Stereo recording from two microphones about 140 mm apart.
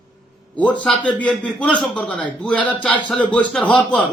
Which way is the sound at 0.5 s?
10° left (ahead or behind).